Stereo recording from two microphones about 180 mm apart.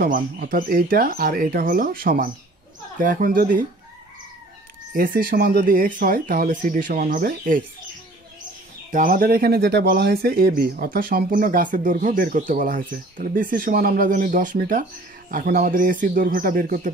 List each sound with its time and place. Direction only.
0.0 s speech: 55° right (ahead or behind)
4.9 s speech: 55° right (ahead or behind)
8.9 s speech: 50° right (ahead or behind)